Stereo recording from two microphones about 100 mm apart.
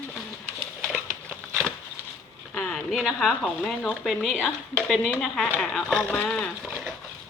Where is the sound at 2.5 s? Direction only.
10° left (ahead or behind).